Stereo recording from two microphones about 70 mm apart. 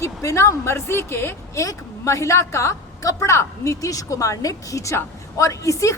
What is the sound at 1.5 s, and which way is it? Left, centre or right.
A woman's voice, left.